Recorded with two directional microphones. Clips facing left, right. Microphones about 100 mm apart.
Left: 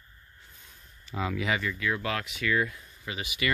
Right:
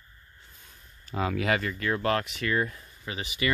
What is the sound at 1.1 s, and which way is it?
Speech, 55° right (ahead or behind).